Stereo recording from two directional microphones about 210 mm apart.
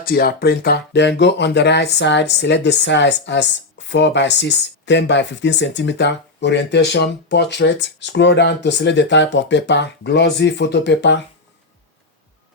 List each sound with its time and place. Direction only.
0.0 s speech: 45° left (ahead or behind)